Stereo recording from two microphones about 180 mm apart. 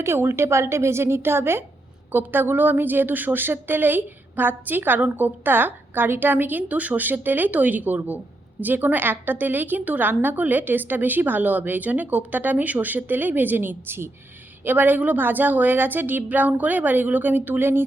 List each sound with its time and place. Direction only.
0.0 s a woman's voice: 15° right (ahead or behind)